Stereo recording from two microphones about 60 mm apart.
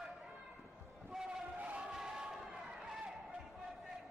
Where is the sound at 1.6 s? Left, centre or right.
Right.